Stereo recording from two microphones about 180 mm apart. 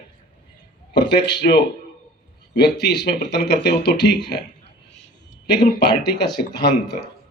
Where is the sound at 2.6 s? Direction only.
65° left (ahead or behind).